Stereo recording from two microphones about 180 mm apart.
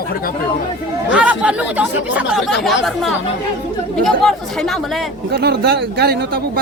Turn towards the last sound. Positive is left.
turn(degrees=-60)  # may be behind; listen again after turning